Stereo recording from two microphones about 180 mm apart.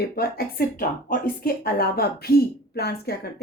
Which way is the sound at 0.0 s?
55° left (ahead or behind).